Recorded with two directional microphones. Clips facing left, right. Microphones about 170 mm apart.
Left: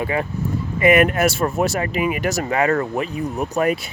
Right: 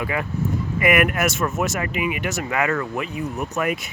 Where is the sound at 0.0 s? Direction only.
30° left (ahead or behind).